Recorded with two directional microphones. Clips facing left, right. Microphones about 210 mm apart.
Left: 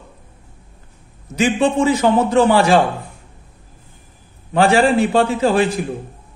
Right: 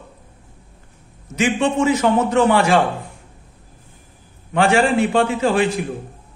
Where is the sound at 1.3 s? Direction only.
35° left (ahead or behind).